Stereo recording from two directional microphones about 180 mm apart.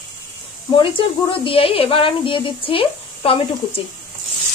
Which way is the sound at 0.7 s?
30° left (ahead or behind).